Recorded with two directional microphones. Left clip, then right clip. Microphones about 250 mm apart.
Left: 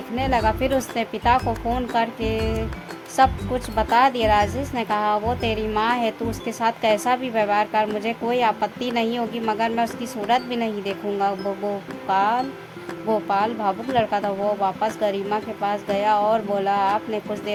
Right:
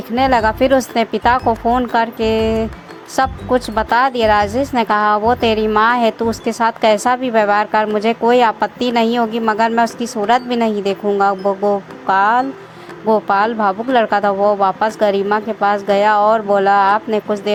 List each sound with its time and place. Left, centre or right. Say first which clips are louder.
0.2 s a woman's voice: right 8 dB; centre